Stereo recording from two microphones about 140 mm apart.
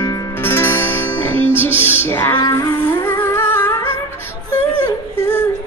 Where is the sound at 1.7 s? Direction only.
10° right (ahead or behind).